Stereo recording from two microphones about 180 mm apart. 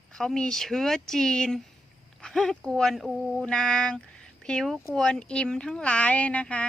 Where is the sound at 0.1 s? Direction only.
5° left (ahead or behind).